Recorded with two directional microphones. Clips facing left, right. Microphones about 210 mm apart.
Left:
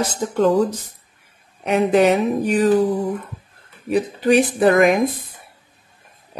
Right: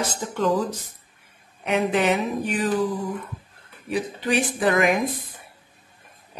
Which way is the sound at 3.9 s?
40° left (ahead or behind).